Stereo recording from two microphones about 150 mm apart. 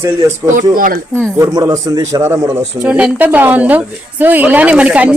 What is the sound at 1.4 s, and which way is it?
Speech, 25° right (ahead or behind).